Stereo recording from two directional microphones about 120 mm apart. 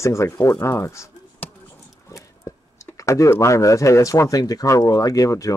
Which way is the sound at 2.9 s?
25° left (ahead or behind).